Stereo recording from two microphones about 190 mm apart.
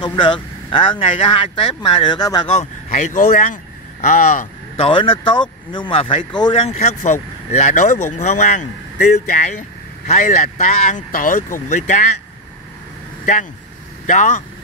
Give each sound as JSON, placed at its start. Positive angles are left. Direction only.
{"t": 0.0, "sound": "speech", "side_deg": 25}
{"t": 2.5, "sound": "speech", "side_deg": 35}
{"t": 4.8, "sound": "speech", "side_deg": 25}
{"t": 13.2, "sound": "speech", "side_deg": 40}